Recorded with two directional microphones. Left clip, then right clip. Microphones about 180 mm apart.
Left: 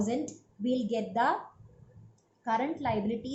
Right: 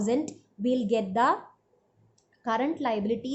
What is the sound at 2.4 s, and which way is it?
Speech, 45° right (ahead or behind).